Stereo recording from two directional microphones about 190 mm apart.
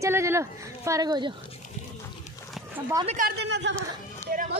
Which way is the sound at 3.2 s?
55° right (ahead or behind).